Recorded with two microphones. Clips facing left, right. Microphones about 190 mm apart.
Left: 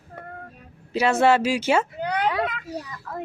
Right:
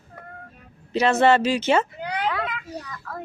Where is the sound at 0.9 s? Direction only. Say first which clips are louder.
Right 1 dB; 10° left (ahead or behind).